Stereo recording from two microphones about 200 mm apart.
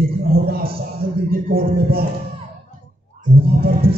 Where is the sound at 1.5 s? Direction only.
50° right (ahead or behind).